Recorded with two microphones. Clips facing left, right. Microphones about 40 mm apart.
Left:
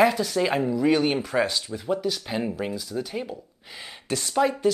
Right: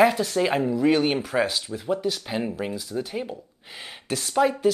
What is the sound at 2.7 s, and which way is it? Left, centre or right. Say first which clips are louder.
Speech: right 1 dB; right.